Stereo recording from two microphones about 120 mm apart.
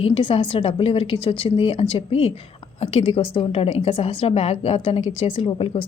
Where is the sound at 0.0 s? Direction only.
45° left (ahead or behind).